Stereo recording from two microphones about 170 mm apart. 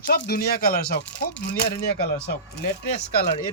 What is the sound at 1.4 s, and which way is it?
Speech, 70° left (ahead or behind).